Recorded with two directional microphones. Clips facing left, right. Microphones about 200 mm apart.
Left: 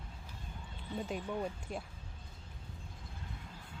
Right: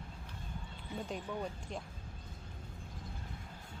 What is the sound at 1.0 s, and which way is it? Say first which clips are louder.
Speech: left 2 dB; 5° left (ahead or behind).